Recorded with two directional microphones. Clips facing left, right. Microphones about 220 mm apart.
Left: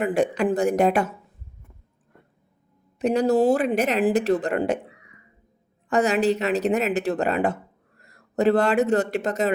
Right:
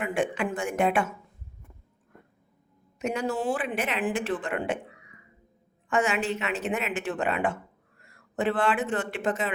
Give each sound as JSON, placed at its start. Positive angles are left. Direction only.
{"t": 0.0, "sound": "speech", "side_deg": 35}
{"t": 3.0, "sound": "speech", "side_deg": 35}
{"t": 5.9, "sound": "speech", "side_deg": 35}